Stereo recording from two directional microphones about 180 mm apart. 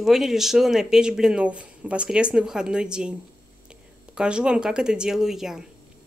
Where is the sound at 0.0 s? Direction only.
Centre (ahead or behind).